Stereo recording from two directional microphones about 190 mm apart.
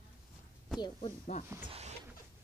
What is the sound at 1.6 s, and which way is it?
Speech, 35° right (ahead or behind).